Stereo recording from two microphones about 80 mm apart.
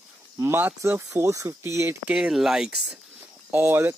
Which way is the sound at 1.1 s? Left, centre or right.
Right.